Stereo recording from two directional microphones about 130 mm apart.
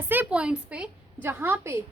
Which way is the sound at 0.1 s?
10° right (ahead or behind).